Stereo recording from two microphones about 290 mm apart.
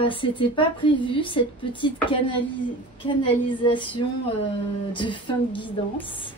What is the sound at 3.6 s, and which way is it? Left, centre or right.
Speech, centre.